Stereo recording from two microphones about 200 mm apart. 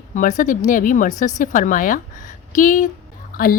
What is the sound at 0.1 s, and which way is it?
A woman's voice, 40° left (ahead or behind).